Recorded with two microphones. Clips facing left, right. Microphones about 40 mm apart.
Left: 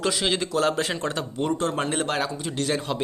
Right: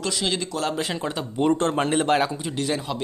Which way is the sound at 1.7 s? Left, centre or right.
Centre.